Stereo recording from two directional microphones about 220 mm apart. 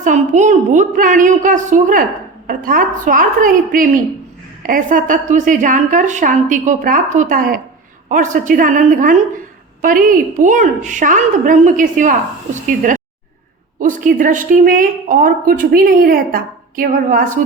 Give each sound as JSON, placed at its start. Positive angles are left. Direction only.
{"t": 0.0, "sound": "a woman's voice", "side_deg": -35}